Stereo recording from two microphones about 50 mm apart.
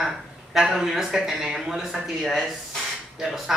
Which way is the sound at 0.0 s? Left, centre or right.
Centre.